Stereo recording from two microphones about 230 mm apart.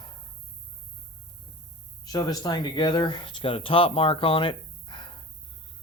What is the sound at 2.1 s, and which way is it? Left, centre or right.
Speech, centre.